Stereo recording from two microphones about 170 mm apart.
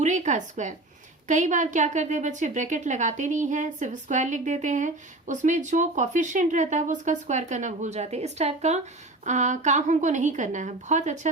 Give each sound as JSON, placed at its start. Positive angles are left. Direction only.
{"t": 0.0, "sound": "a woman's voice", "side_deg": -45}